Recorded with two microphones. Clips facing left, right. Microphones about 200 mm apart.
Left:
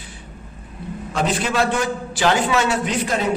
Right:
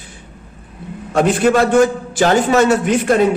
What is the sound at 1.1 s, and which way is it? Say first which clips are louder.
A man's voice: right 9 dB; 50° right (ahead or behind).